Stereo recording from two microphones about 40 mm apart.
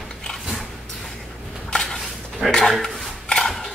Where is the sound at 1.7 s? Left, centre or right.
Centre.